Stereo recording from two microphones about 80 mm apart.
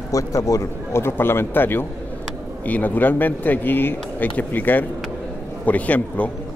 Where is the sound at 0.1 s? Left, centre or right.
Left.